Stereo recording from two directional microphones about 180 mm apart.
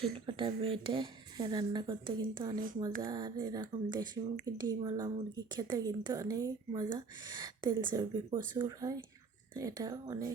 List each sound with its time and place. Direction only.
0.3 s speech: 30° right (ahead or behind)